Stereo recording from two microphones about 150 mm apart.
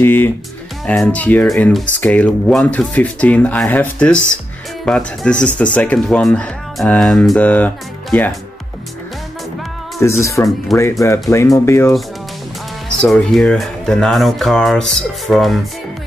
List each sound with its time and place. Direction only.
0.0 s speech: 15° left (ahead or behind)
9.9 s speech: 20° left (ahead or behind)
13.0 s speech: 5° left (ahead or behind)